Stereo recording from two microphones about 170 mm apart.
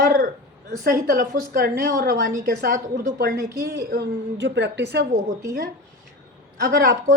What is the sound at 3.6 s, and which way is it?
Speech, 70° right (ahead or behind).